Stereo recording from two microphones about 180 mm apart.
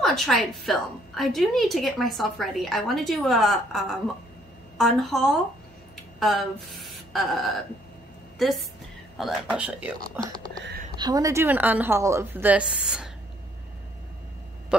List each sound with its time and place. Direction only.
0.0 s a woman's voice: centre (ahead or behind)
10.1 s a woman's voice: 20° right (ahead or behind); by 13.1 s 5° right (ahead or behind)
14.7 s a woman's voice: 5° right (ahead or behind)